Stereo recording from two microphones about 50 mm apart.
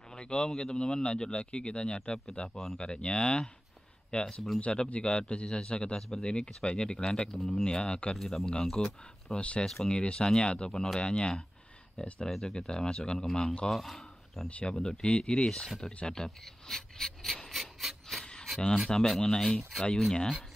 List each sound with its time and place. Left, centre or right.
0.1 s a man's voice: centre
8.2 s speech: centre
8.5 s speech: centre
12.3 s speech: centre
12.5 s speech: centre
14.5 s speech: centre
17.6 s filing: centre
18.2 s a sound: centre
18.9 s speech: centre